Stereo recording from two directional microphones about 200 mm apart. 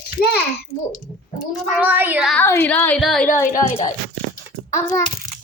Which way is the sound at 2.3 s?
10° left (ahead or behind).